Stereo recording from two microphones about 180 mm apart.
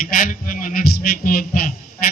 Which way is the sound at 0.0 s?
50° left (ahead or behind).